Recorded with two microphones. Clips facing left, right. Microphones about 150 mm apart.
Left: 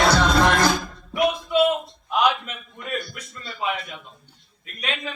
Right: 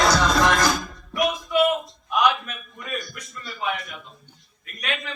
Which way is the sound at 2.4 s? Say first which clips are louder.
Left 2 dB; 25° left (ahead or behind).